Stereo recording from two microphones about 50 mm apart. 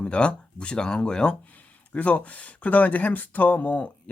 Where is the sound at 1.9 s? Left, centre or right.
Left.